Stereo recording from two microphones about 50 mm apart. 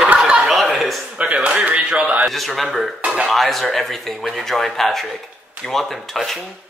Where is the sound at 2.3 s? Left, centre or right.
Centre.